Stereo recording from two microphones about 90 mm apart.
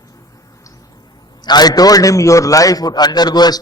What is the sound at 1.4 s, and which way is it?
A man's voice, 50° left (ahead or behind).